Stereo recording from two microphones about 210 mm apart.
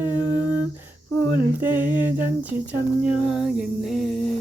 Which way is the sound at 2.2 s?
5° right (ahead or behind).